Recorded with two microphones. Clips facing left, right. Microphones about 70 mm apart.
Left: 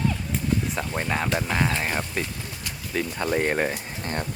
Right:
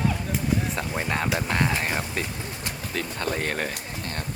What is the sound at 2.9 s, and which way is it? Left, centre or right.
Speech, centre.